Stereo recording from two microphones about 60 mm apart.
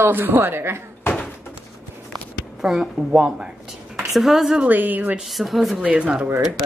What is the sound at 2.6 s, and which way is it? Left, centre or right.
A woman's voice, centre.